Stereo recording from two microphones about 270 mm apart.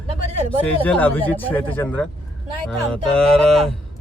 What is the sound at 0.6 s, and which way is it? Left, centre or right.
Speech, centre.